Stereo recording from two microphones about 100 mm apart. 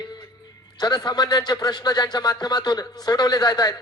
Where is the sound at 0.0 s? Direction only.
40° left (ahead or behind).